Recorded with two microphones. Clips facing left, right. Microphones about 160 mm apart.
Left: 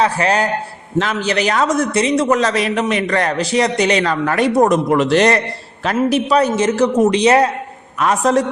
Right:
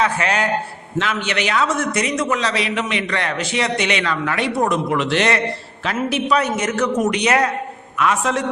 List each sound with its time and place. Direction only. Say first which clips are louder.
0.0 s a man's voice: left 4 dB; 35° left (ahead or behind)